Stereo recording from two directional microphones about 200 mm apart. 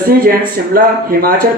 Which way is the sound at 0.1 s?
45° right (ahead or behind).